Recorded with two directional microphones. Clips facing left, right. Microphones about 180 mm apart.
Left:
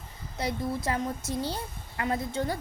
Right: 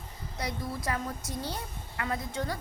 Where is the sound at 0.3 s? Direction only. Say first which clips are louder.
Left 5 dB; 25° left (ahead or behind).